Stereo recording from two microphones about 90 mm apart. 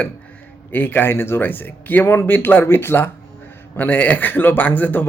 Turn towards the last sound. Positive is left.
turn(degrees=20)  # may be behind; listen again after turning